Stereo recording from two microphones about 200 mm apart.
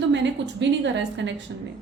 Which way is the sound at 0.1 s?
60° right (ahead or behind).